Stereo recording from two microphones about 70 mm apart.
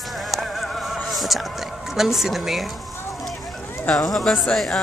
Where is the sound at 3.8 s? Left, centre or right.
Centre.